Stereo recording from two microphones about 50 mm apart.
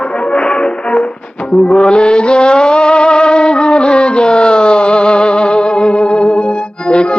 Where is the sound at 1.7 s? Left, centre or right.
Centre.